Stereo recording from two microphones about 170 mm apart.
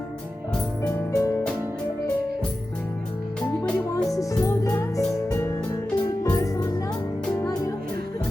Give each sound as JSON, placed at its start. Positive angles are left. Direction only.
{"t": 0.9, "sound": "music", "side_deg": 20}
{"t": 4.2, "sound": "music", "side_deg": 20}